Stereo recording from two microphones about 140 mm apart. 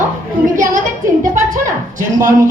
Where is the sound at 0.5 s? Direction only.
70° right (ahead or behind).